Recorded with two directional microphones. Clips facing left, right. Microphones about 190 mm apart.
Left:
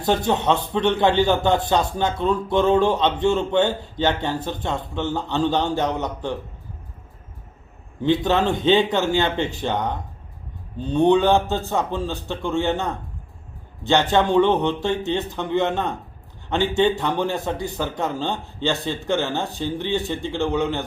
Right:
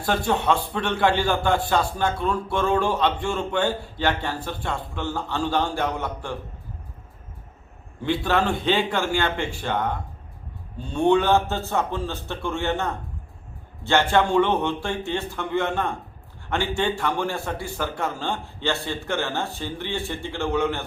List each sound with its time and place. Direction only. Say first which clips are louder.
0.0 s a man's voice: left 3 dB; 20° left (ahead or behind)
8.0 s a man's voice: left 3 dB; 20° left (ahead or behind)